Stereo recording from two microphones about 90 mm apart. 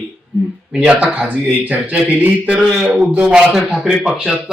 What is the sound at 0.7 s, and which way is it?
A man's voice, 10° right (ahead or behind).